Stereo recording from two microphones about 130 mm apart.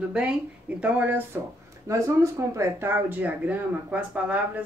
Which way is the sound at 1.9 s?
25° right (ahead or behind).